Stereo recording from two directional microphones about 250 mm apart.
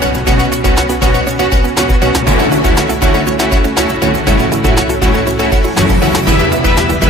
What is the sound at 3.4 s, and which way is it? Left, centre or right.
Music, centre.